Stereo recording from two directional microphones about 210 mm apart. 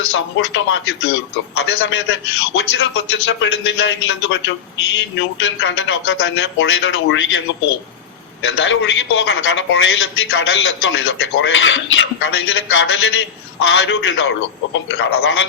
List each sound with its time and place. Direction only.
0.1 s a man's voice: 65° left (ahead or behind)
8.4 s a man's voice: 60° left (ahead or behind)